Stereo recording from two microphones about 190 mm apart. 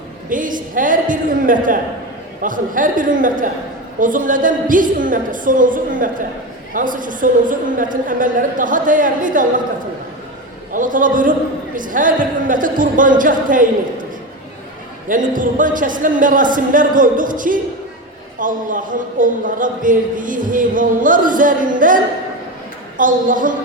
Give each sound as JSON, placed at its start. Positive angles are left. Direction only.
{"t": 0.3, "sound": "a man's voice", "side_deg": -45}
{"t": 10.7, "sound": "a man's voice", "side_deg": -45}
{"t": 15.0, "sound": "a man's voice", "side_deg": -45}